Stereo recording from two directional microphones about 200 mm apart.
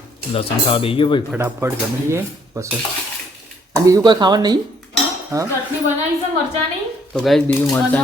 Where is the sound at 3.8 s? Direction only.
20° right (ahead or behind).